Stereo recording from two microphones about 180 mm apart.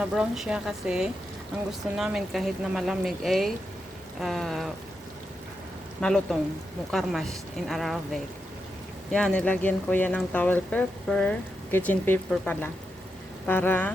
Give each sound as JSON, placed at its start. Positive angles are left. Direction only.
{"t": 0.0, "sound": "speech", "side_deg": -5}
{"t": 6.0, "sound": "speech", "side_deg": 5}